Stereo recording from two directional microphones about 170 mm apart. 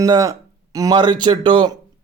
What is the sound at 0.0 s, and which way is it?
A man's voice, 20° right (ahead or behind).